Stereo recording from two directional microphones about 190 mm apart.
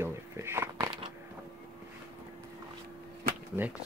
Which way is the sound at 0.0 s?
15° right (ahead or behind).